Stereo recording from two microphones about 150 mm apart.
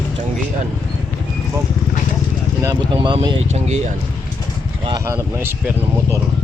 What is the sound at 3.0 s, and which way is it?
Speech, 35° right (ahead or behind).